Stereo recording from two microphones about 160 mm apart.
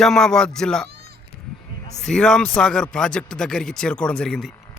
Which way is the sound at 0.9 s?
85° right.